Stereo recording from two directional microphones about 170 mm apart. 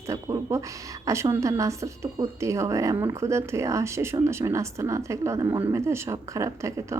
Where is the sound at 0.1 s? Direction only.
15° right (ahead or behind).